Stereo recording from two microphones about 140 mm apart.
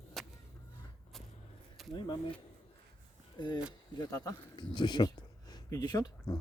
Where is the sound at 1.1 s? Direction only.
Centre (ahead or behind).